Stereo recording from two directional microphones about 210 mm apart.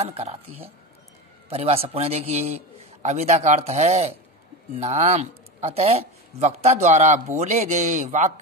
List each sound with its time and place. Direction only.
0.0 s speech: 30° right (ahead or behind)
1.5 s speech: 30° right (ahead or behind)